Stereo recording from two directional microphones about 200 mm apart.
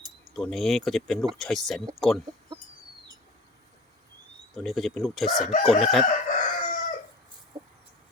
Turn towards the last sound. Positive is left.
turn(degrees=40)  # may be behind; listen again after turning